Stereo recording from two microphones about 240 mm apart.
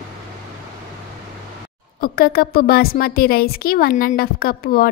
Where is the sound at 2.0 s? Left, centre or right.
Left.